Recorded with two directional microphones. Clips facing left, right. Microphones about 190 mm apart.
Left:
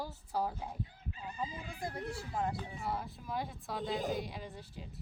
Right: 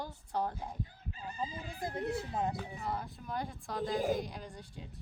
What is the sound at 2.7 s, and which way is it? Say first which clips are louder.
A woman's voice: even; centre (ahead or behind).